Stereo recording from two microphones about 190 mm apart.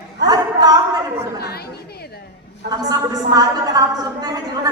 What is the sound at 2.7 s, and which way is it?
A woman's voice, 20° right (ahead or behind).